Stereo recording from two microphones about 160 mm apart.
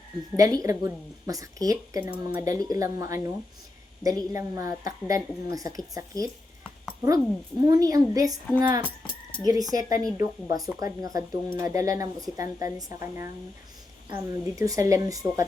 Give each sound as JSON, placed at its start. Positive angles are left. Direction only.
{"t": 0.3, "sound": "a woman's voice", "side_deg": -20}
{"t": 7.6, "sound": "a woman's voice", "side_deg": -20}
{"t": 9.4, "sound": "a woman's voice", "side_deg": -25}